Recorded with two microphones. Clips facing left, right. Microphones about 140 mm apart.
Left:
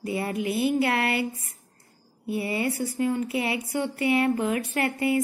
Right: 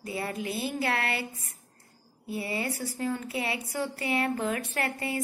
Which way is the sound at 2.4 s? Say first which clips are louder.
Left 5 dB; 25° left (ahead or behind).